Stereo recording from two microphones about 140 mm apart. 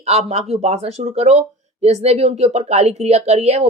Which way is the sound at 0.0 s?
50° right (ahead or behind).